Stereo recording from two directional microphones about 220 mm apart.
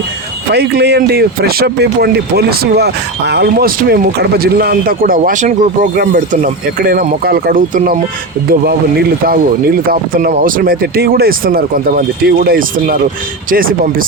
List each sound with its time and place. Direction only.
0.5 s speech: 50° right (ahead or behind)